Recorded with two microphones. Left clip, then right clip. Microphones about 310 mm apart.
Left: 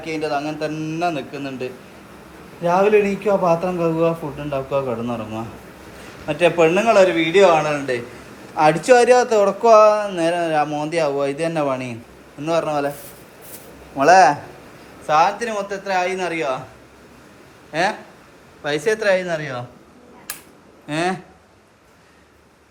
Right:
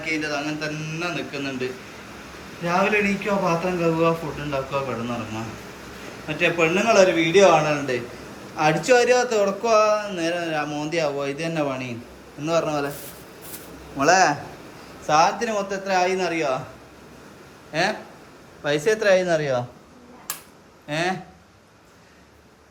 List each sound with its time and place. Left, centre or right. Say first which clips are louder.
0.0 s a man's voice: left 3 dB; centre
14.0 s a man's voice: left 6 dB; centre
17.7 s a man's voice: left 3 dB; centre
20.8 s speech: left 3 dB; centre